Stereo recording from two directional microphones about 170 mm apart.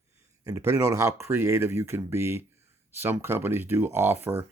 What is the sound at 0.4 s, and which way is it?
Speech, 20° right (ahead or behind).